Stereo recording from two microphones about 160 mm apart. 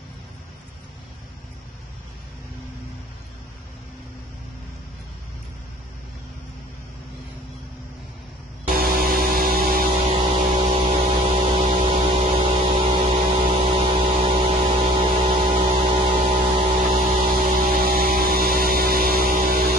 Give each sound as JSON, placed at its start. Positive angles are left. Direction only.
{"t": 8.6, "sound": "music", "side_deg": -65}
{"t": 10.1, "sound": "music", "side_deg": -35}
{"t": 13.1, "sound": "a sound", "side_deg": -40}
{"t": 13.7, "sound": "music", "side_deg": -35}
{"t": 17.3, "sound": "music", "side_deg": -60}